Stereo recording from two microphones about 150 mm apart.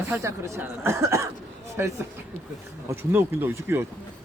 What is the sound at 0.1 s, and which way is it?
Speech, 20° right (ahead or behind).